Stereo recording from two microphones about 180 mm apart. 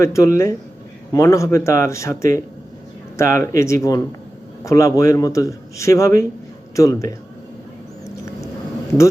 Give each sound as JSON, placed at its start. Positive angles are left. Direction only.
{"t": 0.0, "sound": "a man's voice", "side_deg": 15}
{"t": 8.0, "sound": "vehicle", "side_deg": 15}